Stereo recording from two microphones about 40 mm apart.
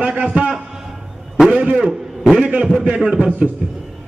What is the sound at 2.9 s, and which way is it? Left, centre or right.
Speech, centre.